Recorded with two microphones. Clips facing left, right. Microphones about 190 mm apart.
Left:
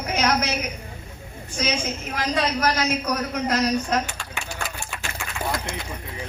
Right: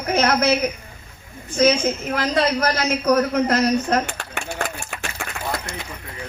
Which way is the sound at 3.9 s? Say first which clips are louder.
Right 4 dB; 60° right (ahead or behind).